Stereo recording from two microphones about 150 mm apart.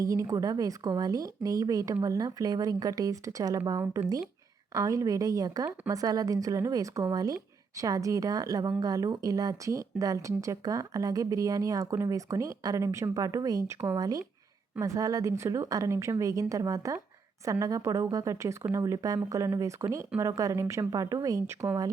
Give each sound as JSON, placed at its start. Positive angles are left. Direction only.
{"t": 0.0, "sound": "speech", "side_deg": -20}